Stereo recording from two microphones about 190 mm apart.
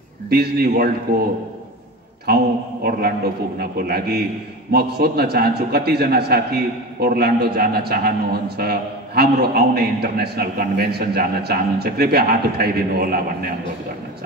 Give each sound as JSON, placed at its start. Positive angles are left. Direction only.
{"t": 0.3, "sound": "a man's voice", "side_deg": -55}
{"t": 2.2, "sound": "a man's voice", "side_deg": -55}